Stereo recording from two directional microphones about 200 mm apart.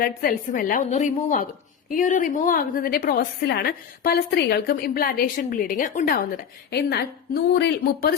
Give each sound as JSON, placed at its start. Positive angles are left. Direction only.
{"t": 0.2, "sound": "a woman's voice", "side_deg": 45}